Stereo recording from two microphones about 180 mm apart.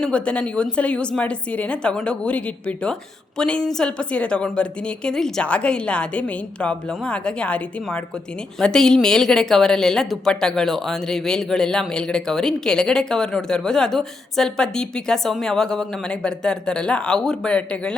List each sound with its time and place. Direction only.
0.0 s a woman's voice: 5° left (ahead or behind)